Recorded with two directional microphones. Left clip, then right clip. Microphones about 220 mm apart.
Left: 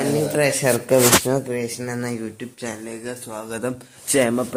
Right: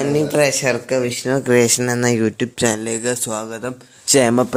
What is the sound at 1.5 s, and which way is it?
Speech, 45° right (ahead or behind).